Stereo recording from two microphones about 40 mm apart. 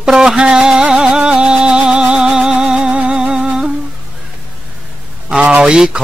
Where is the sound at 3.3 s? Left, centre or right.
Centre.